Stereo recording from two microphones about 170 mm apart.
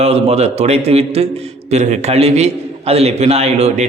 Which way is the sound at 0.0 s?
35° right (ahead or behind).